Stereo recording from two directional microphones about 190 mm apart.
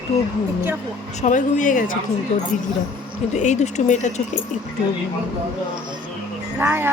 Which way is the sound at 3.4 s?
40° left (ahead or behind).